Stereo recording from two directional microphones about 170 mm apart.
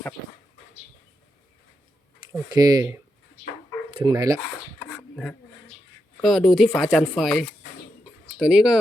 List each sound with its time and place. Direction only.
2.5 s speech: 25° right (ahead or behind)
4.8 s a sound: 5° left (ahead or behind)
6.2 s speech: centre (ahead or behind)